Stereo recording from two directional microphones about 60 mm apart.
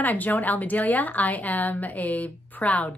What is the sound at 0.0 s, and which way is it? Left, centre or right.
Speech, left.